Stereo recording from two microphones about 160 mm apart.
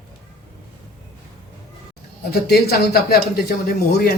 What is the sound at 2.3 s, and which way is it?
Speech, 75° left (ahead or behind).